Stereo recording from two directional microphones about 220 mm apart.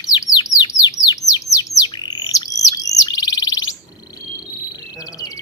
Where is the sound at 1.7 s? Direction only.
20° left (ahead or behind).